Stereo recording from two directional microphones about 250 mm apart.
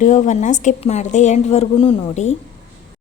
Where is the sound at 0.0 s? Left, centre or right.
Left.